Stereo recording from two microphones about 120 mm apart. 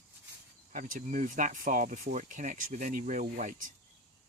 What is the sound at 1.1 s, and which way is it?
Speech, 90° right.